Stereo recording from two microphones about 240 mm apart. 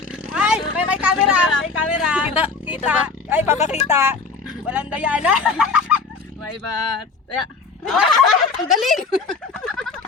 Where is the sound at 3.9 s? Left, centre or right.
Centre.